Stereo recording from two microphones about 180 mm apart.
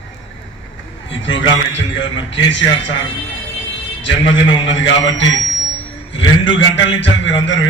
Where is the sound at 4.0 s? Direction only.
90° left.